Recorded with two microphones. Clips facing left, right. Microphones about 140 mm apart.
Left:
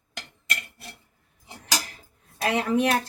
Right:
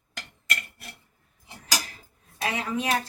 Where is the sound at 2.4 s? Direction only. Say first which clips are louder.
Left 5 dB; 60° left (ahead or behind).